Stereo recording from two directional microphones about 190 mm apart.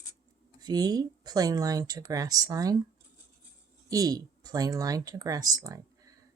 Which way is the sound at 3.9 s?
20° right (ahead or behind).